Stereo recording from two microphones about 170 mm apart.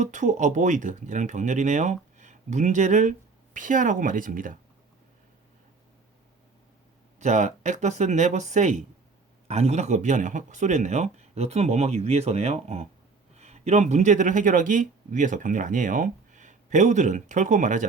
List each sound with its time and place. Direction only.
0.0 s speech: 45° right (ahead or behind)
7.2 s speech: 45° right (ahead or behind)